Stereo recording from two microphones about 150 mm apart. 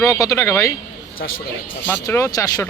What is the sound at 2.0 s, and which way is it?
Speech, 20° left (ahead or behind).